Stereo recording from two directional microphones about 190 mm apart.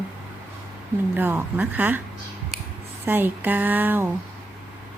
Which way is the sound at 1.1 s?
10° right (ahead or behind).